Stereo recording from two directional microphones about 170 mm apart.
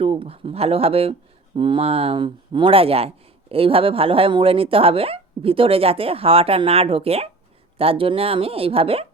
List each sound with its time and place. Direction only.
0.0 s speech: 35° right (ahead or behind)